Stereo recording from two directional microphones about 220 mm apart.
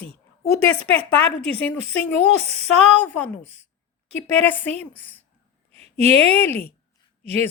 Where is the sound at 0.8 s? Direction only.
5° left (ahead or behind).